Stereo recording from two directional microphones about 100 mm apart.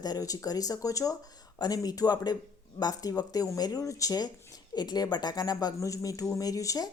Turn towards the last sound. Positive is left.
turn(degrees=35)  # may be behind; listen again after turning